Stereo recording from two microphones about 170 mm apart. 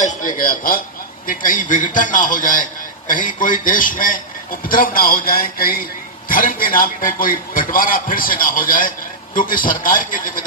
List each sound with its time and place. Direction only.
0.0 s a man's voice: 50° left (ahead or behind)